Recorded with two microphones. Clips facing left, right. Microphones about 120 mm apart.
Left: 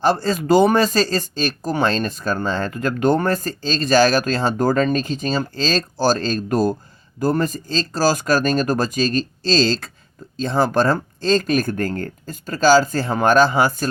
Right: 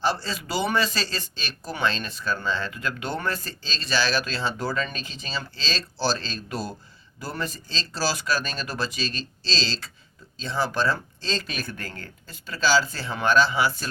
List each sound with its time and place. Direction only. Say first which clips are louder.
0.0 s speech: left 8 dB; 50° left (ahead or behind)